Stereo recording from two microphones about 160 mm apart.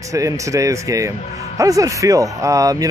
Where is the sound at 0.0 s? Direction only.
20° right (ahead or behind).